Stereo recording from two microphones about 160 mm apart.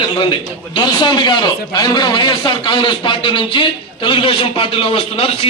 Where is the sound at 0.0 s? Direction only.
35° left (ahead or behind).